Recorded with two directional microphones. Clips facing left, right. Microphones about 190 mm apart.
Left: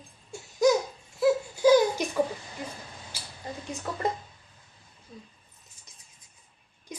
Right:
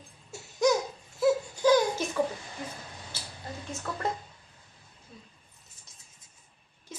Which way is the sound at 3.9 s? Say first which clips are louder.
Left 2 dB; 15° left (ahead or behind).